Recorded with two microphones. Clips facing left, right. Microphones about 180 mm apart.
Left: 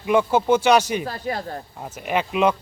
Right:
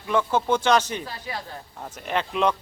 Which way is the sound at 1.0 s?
45° left (ahead or behind).